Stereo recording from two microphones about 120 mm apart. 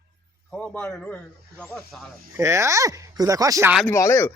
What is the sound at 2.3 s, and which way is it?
Speech, 25° right (ahead or behind).